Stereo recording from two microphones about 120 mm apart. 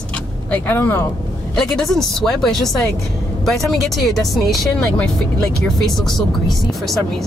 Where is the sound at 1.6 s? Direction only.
5° left (ahead or behind).